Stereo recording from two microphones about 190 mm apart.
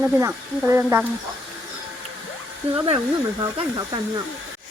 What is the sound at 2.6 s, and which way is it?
Speech, 35° right (ahead or behind).